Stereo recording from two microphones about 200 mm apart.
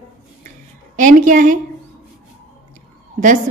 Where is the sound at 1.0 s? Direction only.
40° right (ahead or behind).